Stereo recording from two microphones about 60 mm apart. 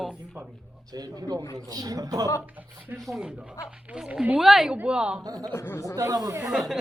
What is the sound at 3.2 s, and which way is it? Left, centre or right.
Speech, centre.